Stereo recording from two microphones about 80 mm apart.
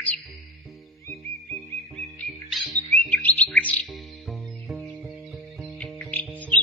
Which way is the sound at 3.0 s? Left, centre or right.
Centre.